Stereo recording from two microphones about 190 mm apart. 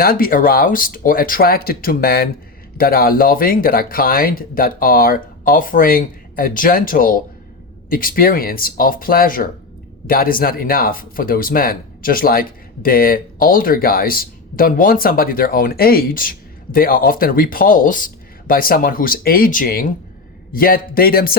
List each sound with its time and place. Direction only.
0.0 s speech: 50° left (ahead or behind)